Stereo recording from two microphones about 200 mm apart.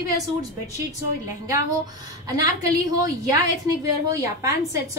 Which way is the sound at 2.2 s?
15° right (ahead or behind).